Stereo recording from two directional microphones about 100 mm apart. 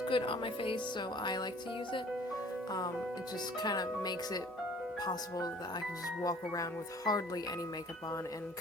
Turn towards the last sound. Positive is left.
turn(degrees=40)  # may be behind; listen again after turning